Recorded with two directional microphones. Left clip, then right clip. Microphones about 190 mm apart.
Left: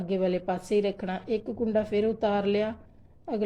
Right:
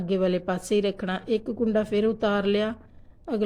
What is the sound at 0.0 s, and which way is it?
A woman's voice, 25° right (ahead or behind).